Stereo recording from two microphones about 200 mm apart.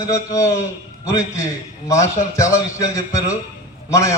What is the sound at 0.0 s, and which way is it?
Speech, 15° left (ahead or behind).